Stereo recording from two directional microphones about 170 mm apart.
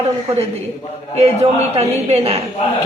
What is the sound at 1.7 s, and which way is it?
Speech, 40° right (ahead or behind).